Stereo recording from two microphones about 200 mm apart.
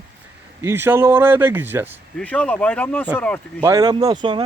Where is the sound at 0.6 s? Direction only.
10° right (ahead or behind).